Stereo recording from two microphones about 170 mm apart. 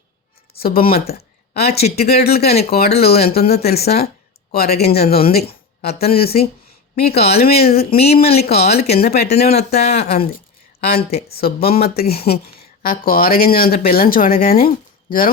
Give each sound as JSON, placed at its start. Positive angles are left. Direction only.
{"t": 0.5, "sound": "speech", "side_deg": 60}
{"t": 1.1, "sound": "a sound", "side_deg": 65}
{"t": 2.0, "sound": "speech", "side_deg": 65}